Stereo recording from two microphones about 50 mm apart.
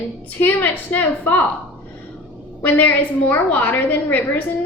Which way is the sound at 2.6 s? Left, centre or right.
Left.